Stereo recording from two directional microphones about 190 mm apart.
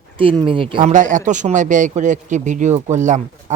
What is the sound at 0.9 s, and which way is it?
Speech, 40° right (ahead or behind).